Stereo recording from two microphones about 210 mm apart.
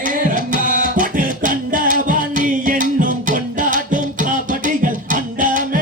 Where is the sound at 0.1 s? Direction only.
40° right (ahead or behind).